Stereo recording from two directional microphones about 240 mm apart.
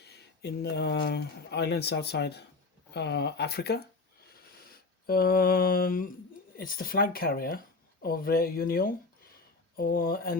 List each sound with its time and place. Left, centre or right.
0.0 s speech: left
4.4 s a sound: left
6.6 s speech: left